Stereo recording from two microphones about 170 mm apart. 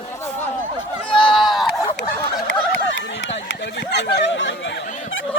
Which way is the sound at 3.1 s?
90° left.